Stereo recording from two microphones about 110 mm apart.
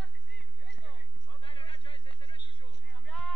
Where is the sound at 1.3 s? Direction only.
55° left (ahead or behind).